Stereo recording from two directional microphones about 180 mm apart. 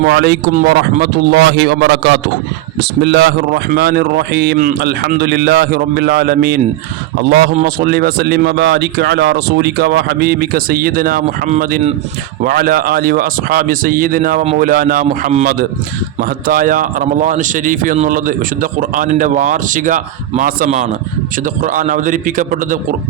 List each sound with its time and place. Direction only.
0.0 s a man's voice: 75° right (ahead or behind)
0.7 s a man's voice: 60° right (ahead or behind)
7.5 s a man's voice: 50° right (ahead or behind)
16.5 s a man's voice: 50° right (ahead or behind)